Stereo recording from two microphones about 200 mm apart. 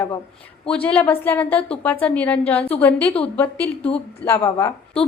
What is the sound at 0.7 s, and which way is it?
A woman's voice, 5° left (ahead or behind).